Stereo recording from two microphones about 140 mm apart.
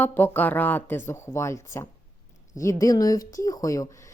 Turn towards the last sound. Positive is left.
turn(degrees=25)  # may be behind; listen again after turning